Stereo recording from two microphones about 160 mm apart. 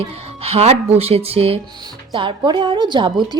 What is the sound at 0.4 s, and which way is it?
Speech, 40° right (ahead or behind).